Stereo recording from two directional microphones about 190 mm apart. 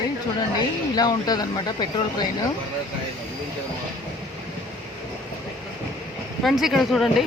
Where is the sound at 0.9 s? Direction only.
20° left (ahead or behind).